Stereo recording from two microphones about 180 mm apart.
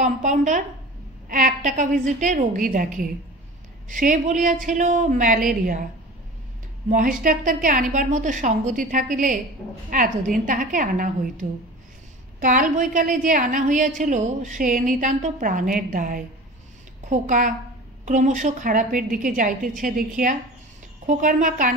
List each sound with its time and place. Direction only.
0.0 s a woman's voice: 45° right (ahead or behind)
6.9 s a woman's voice: 50° right (ahead or behind)
12.4 s a woman's voice: 45° right (ahead or behind)